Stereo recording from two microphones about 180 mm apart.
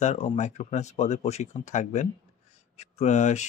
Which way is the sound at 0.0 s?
40° left (ahead or behind).